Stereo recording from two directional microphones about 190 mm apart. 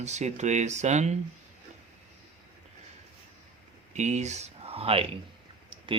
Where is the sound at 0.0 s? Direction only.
35° right (ahead or behind).